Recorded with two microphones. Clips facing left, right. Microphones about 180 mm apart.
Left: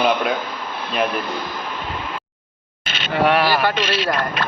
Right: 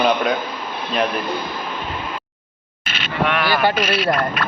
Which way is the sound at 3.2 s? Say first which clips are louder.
Left 4 dB; 35° left (ahead or behind).